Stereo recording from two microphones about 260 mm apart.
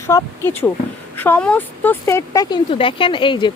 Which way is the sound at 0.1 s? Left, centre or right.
Centre.